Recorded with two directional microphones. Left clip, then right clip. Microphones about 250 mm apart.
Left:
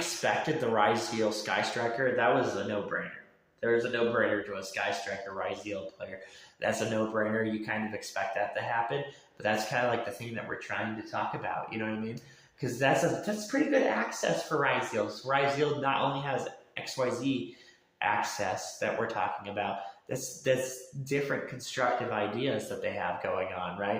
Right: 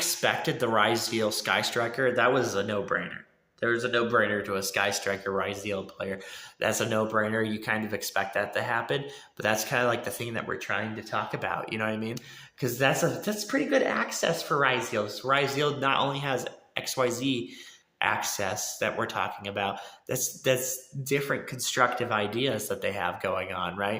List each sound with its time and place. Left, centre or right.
0.0 s speech: right